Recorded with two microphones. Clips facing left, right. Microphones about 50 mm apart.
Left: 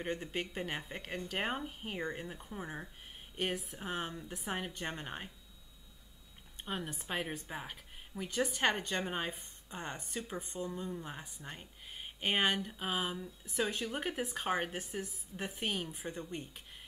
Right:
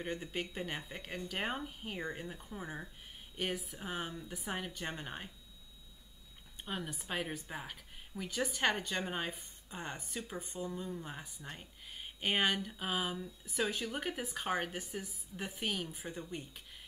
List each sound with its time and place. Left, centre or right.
0.0 s speech: centre
6.6 s speech: centre
10.4 s speech: centre
10.7 s speech: centre
15.9 s speech: centre